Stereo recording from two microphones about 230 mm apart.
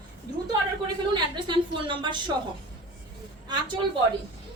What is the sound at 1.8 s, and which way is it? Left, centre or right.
Speech, centre.